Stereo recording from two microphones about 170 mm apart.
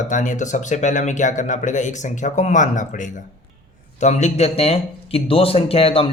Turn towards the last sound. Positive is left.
turn(degrees=35)  # may be behind; listen again after turning